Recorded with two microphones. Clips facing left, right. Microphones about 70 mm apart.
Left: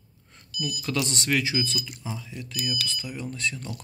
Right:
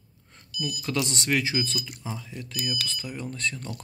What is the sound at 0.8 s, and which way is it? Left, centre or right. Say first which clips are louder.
Speech: even; right.